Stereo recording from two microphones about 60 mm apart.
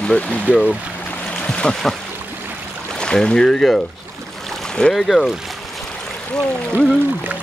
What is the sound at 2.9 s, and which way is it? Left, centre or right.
Speech, centre.